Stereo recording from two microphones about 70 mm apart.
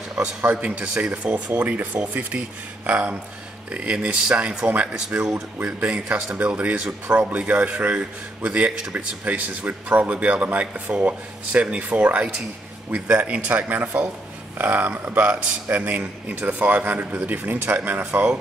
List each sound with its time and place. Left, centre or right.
0.2 s speech: right